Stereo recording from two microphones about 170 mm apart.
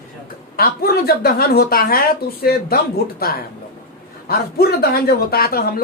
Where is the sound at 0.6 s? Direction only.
65° left (ahead or behind).